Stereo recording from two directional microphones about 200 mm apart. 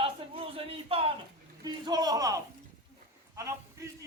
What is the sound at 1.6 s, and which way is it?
Speech, 20° right (ahead or behind).